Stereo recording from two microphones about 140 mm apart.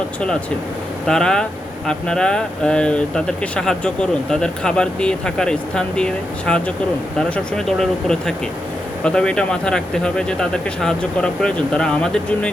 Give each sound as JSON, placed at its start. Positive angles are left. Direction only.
{"t": 1.0, "sound": "speech", "side_deg": 5}